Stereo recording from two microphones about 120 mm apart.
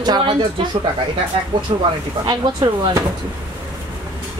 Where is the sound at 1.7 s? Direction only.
45° right (ahead or behind).